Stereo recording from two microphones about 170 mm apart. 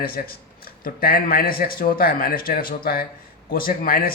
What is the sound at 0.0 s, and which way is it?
A man's voice, 60° left (ahead or behind).